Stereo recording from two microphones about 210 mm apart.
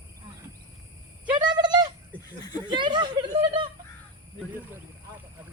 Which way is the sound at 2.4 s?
15° left (ahead or behind).